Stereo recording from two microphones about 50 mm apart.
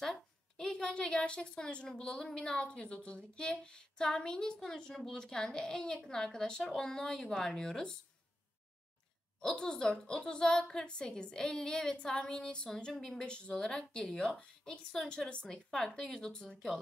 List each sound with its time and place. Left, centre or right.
0.7 s a woman's voice: centre
9.4 s a woman's voice: centre